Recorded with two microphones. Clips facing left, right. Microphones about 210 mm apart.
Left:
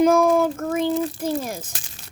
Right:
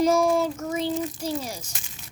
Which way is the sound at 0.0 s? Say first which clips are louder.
Left 4 dB; 55° left (ahead or behind).